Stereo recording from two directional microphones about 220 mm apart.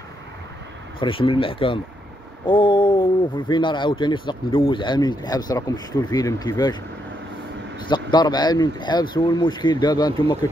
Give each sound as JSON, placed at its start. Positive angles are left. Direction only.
{"t": 0.9, "sound": "speech", "side_deg": 25}
{"t": 7.9, "sound": "speech", "side_deg": 20}